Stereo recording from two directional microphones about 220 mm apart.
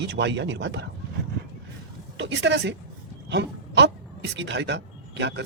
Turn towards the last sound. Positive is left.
turn(degrees=-50)  # may be behind; listen again after turning